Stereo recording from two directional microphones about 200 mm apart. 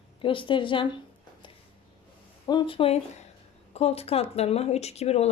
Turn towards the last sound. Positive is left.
turn(degrees=30)  # may be behind; listen again after turning